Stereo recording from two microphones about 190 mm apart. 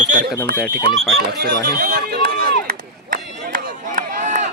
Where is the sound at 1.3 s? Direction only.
60° right (ahead or behind); by 4.5 s 40° right (ahead or behind).